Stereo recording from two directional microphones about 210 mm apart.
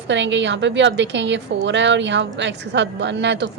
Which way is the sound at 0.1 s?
60° right (ahead or behind).